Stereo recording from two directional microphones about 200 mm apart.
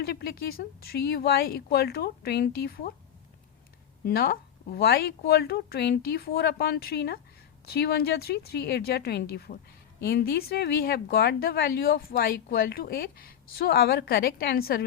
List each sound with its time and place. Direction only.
0.0 s speech: 55° left (ahead or behind)
4.0 s speech: 50° left (ahead or behind)